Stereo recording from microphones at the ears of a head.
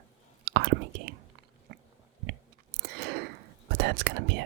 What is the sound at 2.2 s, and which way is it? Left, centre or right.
Whispering, right.